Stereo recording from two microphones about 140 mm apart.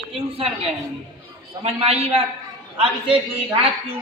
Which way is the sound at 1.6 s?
50° right (ahead or behind).